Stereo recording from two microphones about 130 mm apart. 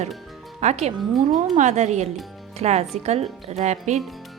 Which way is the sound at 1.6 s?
65° right (ahead or behind).